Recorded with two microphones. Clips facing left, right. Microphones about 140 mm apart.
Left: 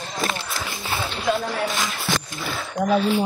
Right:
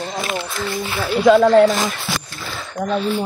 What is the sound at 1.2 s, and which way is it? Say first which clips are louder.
Speech: right 14 dB; 80° right.